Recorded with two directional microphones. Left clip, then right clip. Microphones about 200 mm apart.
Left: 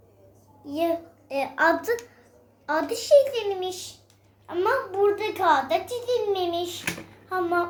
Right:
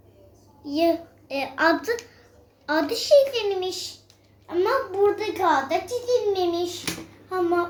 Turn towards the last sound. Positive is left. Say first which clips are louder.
# right 1 dB
turn(degrees=0)  # may be behind; listen again after turning